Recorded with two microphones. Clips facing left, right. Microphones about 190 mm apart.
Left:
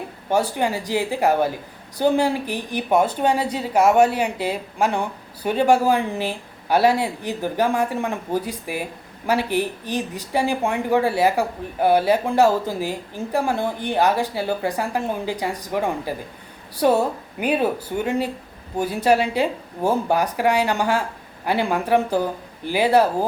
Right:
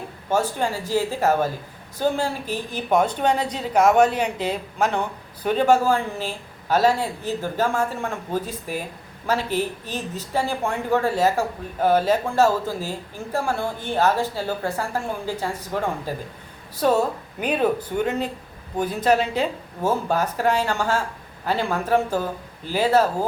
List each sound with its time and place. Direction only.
0.3 s a woman's voice: 15° left (ahead or behind)